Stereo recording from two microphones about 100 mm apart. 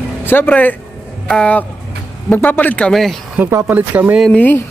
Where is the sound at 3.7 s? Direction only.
15° right (ahead or behind).